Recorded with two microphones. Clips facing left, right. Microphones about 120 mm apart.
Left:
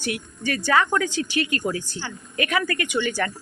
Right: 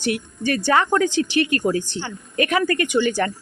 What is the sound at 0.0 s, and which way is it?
Speech, 30° right (ahead or behind).